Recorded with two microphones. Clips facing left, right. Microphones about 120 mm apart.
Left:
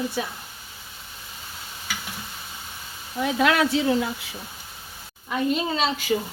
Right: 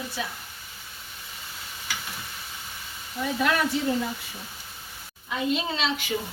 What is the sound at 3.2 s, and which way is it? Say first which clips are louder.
Speech: left 4 dB; 90° left.